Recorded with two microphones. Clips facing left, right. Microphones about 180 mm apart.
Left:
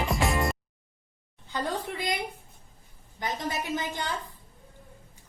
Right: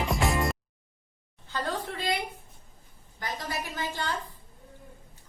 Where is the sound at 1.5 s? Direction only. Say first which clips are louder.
Left 1 dB; 15° left (ahead or behind).